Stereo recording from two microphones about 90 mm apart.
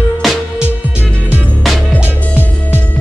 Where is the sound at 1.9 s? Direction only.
25° left (ahead or behind).